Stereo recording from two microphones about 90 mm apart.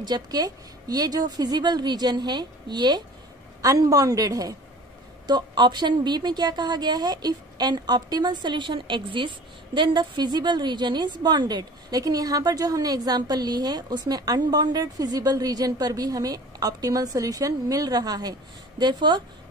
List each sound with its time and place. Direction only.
0.0 s a woman's voice: 45° right (ahead or behind)
5.2 s a woman's voice: 55° right (ahead or behind)
9.8 s a woman's voice: 55° right (ahead or behind)